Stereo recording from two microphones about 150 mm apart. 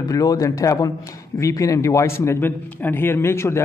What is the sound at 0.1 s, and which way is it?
A man's voice, 25° left (ahead or behind).